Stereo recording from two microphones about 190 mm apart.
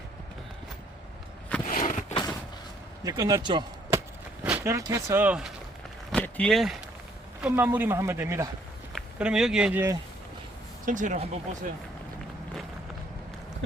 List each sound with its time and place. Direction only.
1.6 s a sound: 40° left (ahead or behind)
3.0 s speech: 20° right (ahead or behind)
4.4 s speech: 10° right (ahead or behind)
6.1 s speech: 5° left (ahead or behind)
7.4 s speech: 10° right (ahead or behind)
10.8 s speech: 40° right (ahead or behind)